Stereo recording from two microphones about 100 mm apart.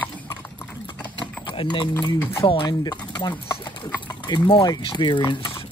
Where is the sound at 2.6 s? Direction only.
45° left (ahead or behind).